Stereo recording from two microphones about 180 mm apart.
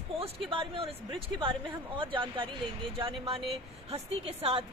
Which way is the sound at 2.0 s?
25° right (ahead or behind).